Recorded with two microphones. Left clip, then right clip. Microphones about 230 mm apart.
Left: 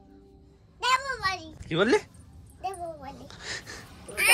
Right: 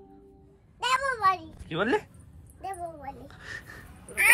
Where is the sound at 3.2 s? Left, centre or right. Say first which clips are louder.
Left 3 dB; centre.